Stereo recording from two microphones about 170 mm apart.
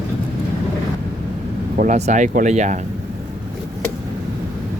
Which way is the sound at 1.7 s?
40° right (ahead or behind).